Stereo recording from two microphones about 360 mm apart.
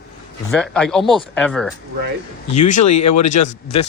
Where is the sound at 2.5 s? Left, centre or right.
Centre.